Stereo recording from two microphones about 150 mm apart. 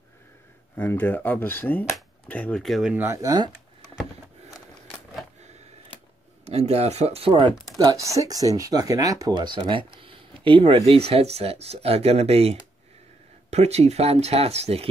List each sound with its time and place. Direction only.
0.7 s speech: 15° left (ahead or behind); by 3.1 s 5° right (ahead or behind)
3.1 s speech: 25° right (ahead or behind)
6.4 s speech: 45° right (ahead or behind)